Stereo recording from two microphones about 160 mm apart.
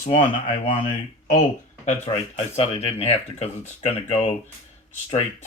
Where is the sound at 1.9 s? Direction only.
40° left (ahead or behind).